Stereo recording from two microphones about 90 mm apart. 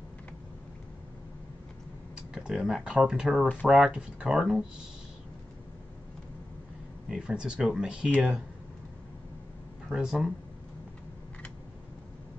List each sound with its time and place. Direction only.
2.1 s speech: 5° right (ahead or behind)
7.1 s speech: 10° right (ahead or behind)
9.8 s speech: 5° right (ahead or behind)